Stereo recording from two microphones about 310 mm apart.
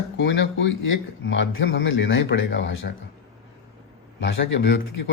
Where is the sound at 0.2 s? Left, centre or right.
Left.